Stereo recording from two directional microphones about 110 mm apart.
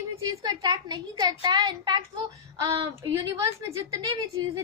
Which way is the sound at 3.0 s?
30° right (ahead or behind).